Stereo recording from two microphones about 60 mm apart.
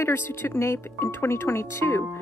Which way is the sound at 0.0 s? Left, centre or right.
Left.